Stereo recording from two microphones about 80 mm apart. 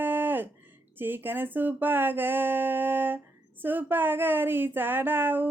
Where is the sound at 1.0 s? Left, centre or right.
Right.